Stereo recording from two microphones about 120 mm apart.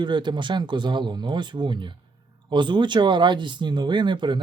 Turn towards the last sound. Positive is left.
turn(degrees=-40)  # may be behind; listen again after turning